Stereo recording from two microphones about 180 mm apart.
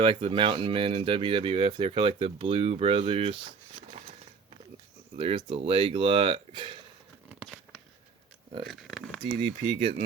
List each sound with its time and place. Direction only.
0.0 s speech: 30° right (ahead or behind)
5.1 s speech: 30° right (ahead or behind)
7.3 s a sound: 5° right (ahead or behind)
9.2 s speech: 30° right (ahead or behind)